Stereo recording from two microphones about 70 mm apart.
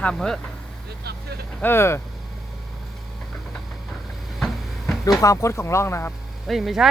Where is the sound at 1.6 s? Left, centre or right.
Left.